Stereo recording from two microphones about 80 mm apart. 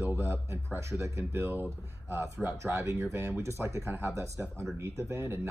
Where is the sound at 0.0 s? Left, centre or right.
Right.